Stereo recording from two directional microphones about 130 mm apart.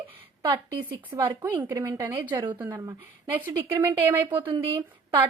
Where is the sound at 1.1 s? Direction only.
25° right (ahead or behind).